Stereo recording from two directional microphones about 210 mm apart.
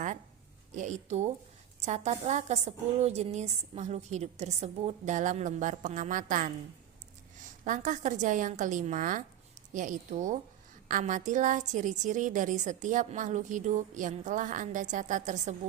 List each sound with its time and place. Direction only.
0.8 s a woman's voice: 35° right (ahead or behind)